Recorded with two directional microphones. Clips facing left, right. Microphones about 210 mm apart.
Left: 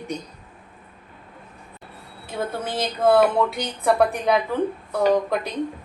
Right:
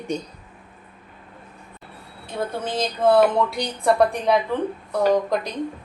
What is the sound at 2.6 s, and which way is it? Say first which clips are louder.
A woman's voice: even; 5° left (ahead or behind).